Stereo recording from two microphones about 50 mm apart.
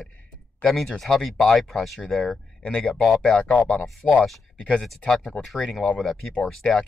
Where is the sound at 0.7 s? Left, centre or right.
Centre.